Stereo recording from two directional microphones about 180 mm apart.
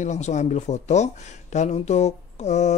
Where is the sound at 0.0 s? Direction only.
40° left (ahead or behind).